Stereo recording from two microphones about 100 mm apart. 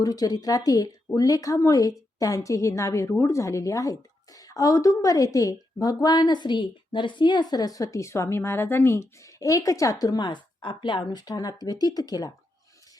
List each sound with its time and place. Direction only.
0.0 s speech: 40° left (ahead or behind)
7.5 s speech: 40° left (ahead or behind)